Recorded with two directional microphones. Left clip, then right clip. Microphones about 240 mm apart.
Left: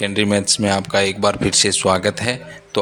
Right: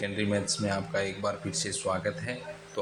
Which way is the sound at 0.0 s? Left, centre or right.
Left.